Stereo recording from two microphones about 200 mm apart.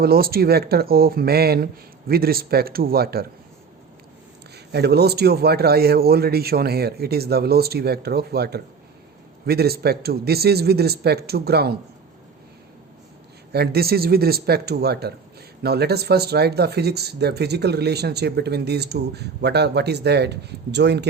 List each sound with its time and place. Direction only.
0.0 s a man's voice: 50° right (ahead or behind)
4.5 s a man's voice: 55° right (ahead or behind)
13.5 s a man's voice: 50° right (ahead or behind)